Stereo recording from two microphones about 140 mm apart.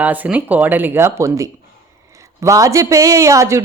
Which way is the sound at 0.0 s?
10° right (ahead or behind).